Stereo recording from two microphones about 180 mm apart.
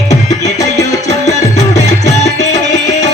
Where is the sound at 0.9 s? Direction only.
40° left (ahead or behind).